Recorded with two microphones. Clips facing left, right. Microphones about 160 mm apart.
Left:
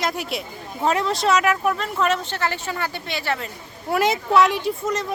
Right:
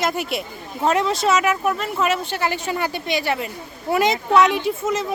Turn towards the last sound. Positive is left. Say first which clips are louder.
# right 2 dB
turn(degrees=-5)  # may be behind; listen again after turning